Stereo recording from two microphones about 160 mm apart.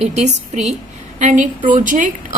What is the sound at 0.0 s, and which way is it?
A woman's voice, 45° right (ahead or behind).